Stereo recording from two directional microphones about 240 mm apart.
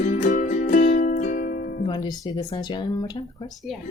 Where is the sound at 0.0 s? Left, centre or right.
Left.